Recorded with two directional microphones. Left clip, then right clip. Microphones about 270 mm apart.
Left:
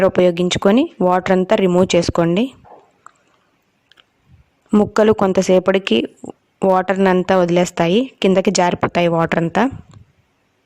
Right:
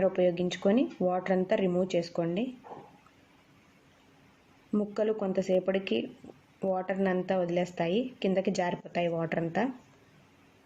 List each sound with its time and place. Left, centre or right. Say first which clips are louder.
0.0 s speech: left 13 dB; left
4.7 s speech: left 16 dB; left